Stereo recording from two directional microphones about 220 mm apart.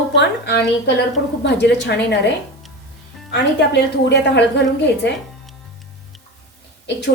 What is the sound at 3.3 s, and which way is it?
A woman's voice, 50° left (ahead or behind).